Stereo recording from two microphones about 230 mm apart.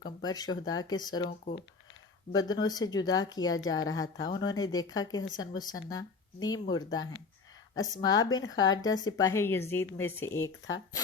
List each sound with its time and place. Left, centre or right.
0.0 s speech: centre
2.3 s speech: centre
8.3 s a woman's voice: left
8.8 s speech: centre